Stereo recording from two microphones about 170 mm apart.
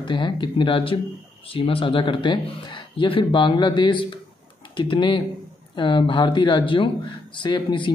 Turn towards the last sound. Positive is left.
turn(degrees=30)  # may be behind; listen again after turning